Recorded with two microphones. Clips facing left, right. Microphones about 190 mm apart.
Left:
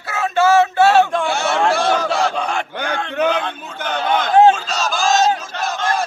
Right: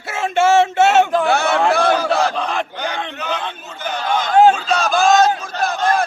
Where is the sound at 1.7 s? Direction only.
60° right (ahead or behind).